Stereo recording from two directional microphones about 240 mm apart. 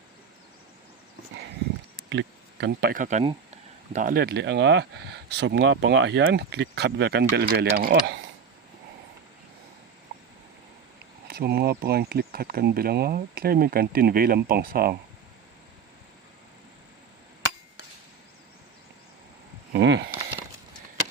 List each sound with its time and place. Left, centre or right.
2.0 s speech: right
11.3 s speech: right
19.7 s a sound: right